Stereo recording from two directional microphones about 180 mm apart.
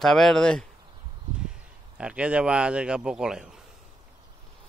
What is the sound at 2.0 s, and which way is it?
Speech, 5° right (ahead or behind).